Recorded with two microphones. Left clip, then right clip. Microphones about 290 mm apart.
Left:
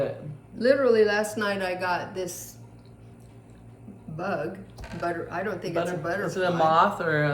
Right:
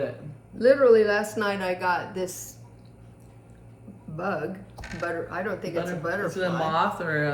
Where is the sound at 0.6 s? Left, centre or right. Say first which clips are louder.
Right 2 dB; centre.